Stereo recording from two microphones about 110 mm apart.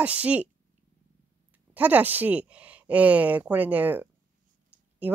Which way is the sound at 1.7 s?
15° right (ahead or behind).